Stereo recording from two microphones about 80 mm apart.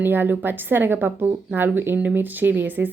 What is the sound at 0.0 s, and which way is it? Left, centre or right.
A woman's voice, right.